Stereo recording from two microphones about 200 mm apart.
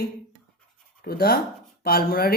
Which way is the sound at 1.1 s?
50° left (ahead or behind).